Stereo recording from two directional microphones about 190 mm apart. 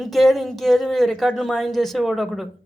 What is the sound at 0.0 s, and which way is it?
A man's voice, centre (ahead or behind).